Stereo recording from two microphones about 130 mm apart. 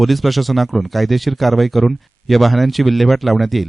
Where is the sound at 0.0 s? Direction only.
Centre (ahead or behind).